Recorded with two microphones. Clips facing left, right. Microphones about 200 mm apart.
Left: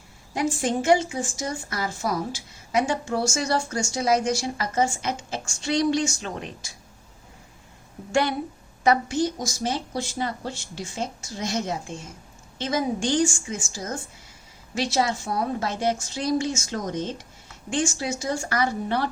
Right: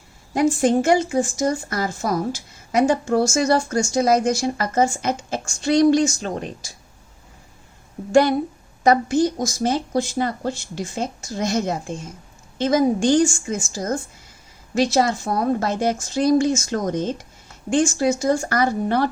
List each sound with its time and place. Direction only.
0.3 s a woman's voice: 50° right (ahead or behind)
8.1 s a woman's voice: 40° right (ahead or behind)